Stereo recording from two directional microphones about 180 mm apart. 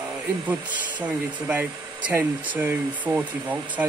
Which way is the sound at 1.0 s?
10° right (ahead or behind).